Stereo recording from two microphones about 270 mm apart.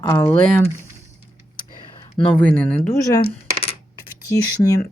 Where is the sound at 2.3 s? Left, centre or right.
Centre.